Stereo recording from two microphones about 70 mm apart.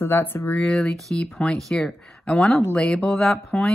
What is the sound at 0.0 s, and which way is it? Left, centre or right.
Speech, left.